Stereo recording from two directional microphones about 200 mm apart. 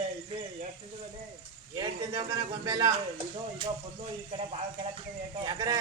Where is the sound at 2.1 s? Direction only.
20° right (ahead or behind).